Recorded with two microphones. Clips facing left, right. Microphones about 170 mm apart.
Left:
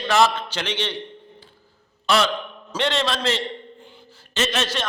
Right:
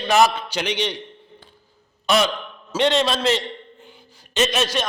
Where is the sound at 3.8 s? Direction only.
15° right (ahead or behind).